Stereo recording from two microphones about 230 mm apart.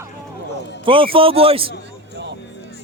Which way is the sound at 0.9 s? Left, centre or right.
Right.